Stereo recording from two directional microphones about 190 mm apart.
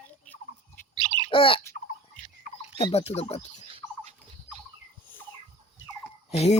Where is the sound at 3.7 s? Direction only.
35° right (ahead or behind).